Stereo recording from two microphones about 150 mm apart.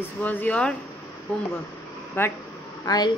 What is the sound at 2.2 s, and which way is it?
Speech, 15° left (ahead or behind).